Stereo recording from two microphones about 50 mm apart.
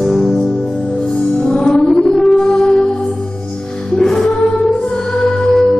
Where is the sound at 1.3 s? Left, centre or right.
Centre.